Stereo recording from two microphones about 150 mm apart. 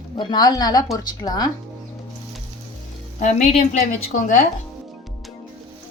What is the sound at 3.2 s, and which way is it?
A woman's voice, 50° left (ahead or behind).